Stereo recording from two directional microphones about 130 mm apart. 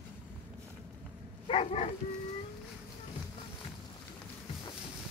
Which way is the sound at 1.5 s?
50° left (ahead or behind).